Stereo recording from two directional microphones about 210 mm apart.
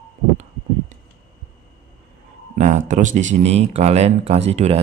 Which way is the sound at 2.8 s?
35° right (ahead or behind).